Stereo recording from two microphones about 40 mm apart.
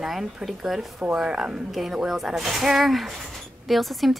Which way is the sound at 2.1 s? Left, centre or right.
Centre.